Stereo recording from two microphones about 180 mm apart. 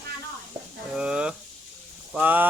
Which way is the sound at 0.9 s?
5° right (ahead or behind).